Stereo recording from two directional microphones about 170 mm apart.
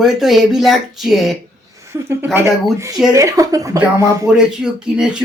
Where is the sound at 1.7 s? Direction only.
15° right (ahead or behind).